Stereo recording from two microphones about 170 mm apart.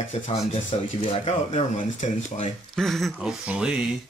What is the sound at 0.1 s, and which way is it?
Speech, 40° left (ahead or behind).